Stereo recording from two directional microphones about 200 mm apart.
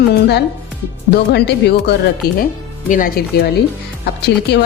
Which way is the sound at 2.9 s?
45° left (ahead or behind).